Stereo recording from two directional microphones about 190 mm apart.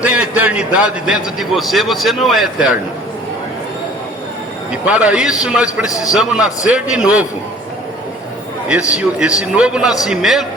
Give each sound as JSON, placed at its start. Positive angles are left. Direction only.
{"t": 0.0, "sound": "a man's voice", "side_deg": -5}
{"t": 4.7, "sound": "a man's voice", "side_deg": -5}
{"t": 5.9, "sound": "a man's voice", "side_deg": 20}
{"t": 6.1, "sound": "a man's voice", "side_deg": 0}
{"t": 8.9, "sound": "a man's voice", "side_deg": -5}